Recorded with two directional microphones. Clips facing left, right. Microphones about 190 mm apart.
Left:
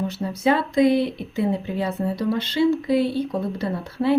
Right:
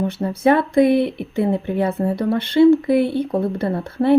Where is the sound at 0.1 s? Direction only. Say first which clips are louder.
Right 5 dB; 55° right (ahead or behind).